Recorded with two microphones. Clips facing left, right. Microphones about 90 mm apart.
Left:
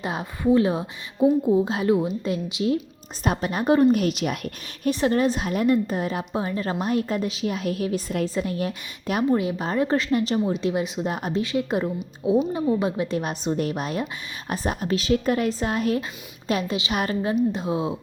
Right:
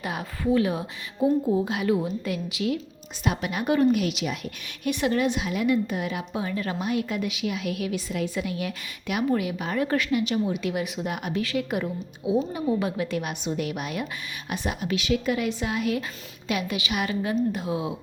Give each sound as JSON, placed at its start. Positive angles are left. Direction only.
{"t": 0.0, "sound": "a woman's voice", "side_deg": 25}
{"t": 4.9, "sound": "a woman's voice", "side_deg": 35}
{"t": 10.1, "sound": "a woman's voice", "side_deg": 40}
{"t": 12.2, "sound": "a woman's voice", "side_deg": 40}
{"t": 12.6, "sound": "a woman's voice", "side_deg": 25}
{"t": 16.9, "sound": "a woman's voice", "side_deg": 40}
{"t": 17.5, "sound": "a woman's voice", "side_deg": 25}